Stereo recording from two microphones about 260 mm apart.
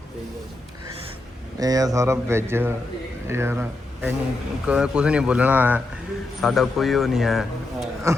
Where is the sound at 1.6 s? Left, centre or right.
Centre.